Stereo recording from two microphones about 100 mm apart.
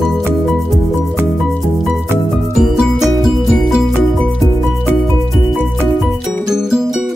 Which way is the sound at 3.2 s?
Centre (ahead or behind).